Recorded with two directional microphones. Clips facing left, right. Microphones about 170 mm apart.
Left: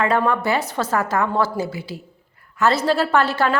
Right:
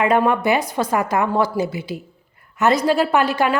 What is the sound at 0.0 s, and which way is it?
A woman's voice, 15° right (ahead or behind).